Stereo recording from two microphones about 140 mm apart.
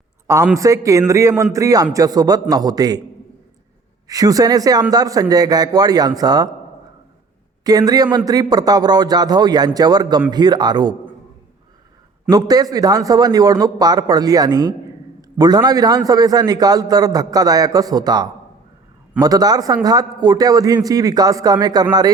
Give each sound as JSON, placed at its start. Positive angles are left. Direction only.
{"t": 0.5, "sound": "a man's voice", "side_deg": -25}
{"t": 4.1, "sound": "a man's voice", "side_deg": -25}
{"t": 7.6, "sound": "a man's voice", "side_deg": -25}
{"t": 12.3, "sound": "a man's voice", "side_deg": -25}